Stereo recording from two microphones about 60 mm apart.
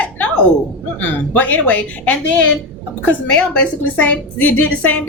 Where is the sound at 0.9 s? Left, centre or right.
Left.